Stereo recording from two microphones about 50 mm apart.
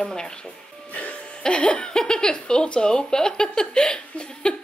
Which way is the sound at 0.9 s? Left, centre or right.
Left.